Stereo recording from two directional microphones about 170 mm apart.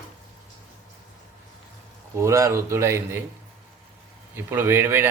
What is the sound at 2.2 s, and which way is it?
Speech, 15° right (ahead or behind).